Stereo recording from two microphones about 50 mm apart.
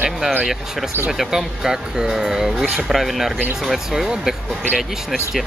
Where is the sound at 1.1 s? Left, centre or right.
Centre.